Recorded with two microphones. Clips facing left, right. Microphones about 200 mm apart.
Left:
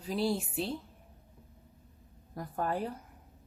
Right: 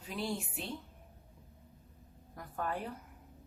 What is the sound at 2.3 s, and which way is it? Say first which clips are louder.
Speech: left 5 dB; 35° left (ahead or behind).